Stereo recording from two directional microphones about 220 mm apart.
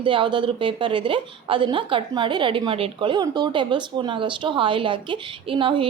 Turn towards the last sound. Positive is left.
turn(degrees=-20)  # may be behind; listen again after turning